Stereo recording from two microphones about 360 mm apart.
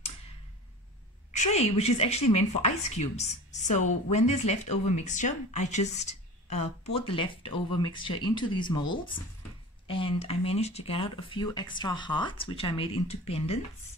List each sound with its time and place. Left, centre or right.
1.3 s speech: centre